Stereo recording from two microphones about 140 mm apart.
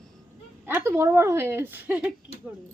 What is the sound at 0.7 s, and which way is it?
A woman's voice, 15° right (ahead or behind).